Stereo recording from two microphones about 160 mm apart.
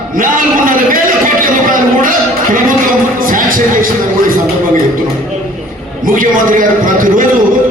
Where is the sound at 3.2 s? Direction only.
60° right (ahead or behind).